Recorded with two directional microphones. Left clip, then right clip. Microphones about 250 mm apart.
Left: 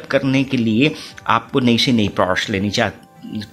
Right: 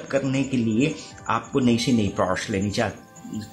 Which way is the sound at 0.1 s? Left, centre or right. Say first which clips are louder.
Left 7 dB; left.